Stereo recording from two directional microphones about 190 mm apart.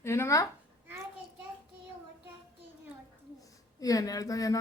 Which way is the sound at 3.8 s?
20° left (ahead or behind).